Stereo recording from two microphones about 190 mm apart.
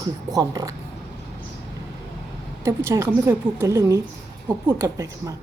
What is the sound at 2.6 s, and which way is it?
A woman's voice, 15° right (ahead or behind).